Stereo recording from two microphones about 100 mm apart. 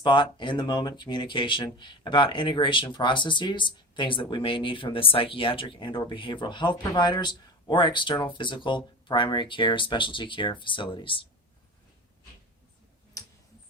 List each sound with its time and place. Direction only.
0.0 s speech: 55° left (ahead or behind)